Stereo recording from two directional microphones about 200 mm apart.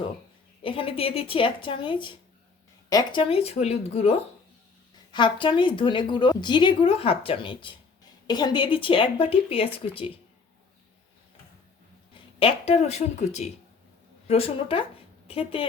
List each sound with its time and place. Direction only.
0.6 s a woman's voice: 25° left (ahead or behind)
5.1 s a woman's voice: 25° left (ahead or behind)
12.1 s a woman's voice: 30° left (ahead or behind)